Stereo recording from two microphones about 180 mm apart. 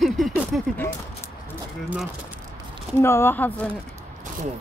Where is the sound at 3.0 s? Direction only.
15° left (ahead or behind).